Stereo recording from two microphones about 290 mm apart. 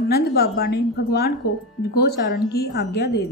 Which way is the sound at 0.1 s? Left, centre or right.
Left.